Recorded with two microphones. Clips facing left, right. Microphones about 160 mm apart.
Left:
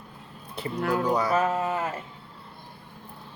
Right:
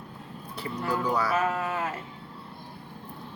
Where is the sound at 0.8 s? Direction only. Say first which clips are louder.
Left 4 dB; 60° left (ahead or behind).